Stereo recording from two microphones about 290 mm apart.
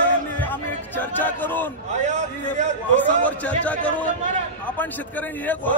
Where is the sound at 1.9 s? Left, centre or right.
Right.